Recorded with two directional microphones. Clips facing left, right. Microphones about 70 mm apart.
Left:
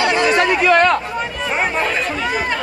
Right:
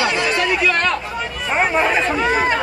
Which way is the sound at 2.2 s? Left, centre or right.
Right.